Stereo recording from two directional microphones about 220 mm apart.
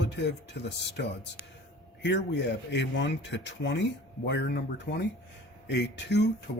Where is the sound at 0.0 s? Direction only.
50° left (ahead or behind).